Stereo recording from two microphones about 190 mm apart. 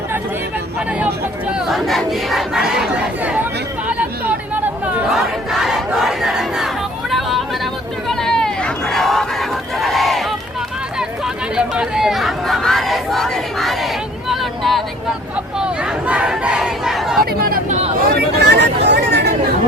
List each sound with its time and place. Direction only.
0.9 s speech: 5° right (ahead or behind)
1.5 s crowd: centre (ahead or behind)
3.8 s chatter: 5° right (ahead or behind)
5.1 s battle cry: centre (ahead or behind)
7.1 s chatter: centre (ahead or behind)
11.5 s a sound: 5° right (ahead or behind)
17.4 s chatter: 50° right (ahead or behind)
18.1 s a sound: 60° right (ahead or behind)